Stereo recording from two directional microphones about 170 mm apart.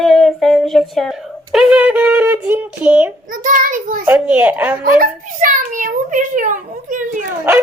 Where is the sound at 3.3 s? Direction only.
50° right (ahead or behind).